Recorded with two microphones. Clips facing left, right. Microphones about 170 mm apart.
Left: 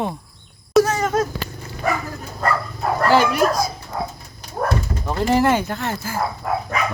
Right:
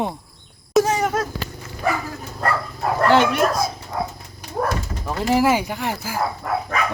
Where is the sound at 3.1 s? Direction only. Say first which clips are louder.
Left 1 dB; centre (ahead or behind).